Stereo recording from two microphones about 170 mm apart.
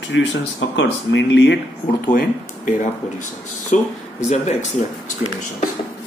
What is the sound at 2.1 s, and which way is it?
Speech, 50° left (ahead or behind).